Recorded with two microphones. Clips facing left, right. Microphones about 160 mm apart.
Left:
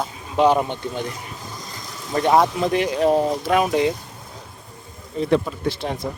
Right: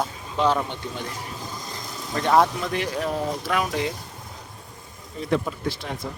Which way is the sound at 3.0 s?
30° left (ahead or behind).